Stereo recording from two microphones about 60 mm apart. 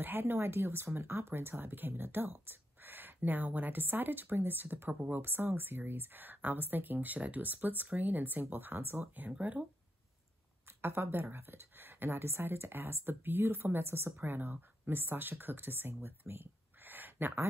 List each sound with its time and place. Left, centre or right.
0.0 s speech: right
10.8 s speech: right